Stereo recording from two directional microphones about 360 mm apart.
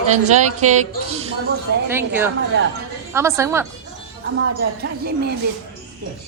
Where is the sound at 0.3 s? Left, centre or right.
Centre.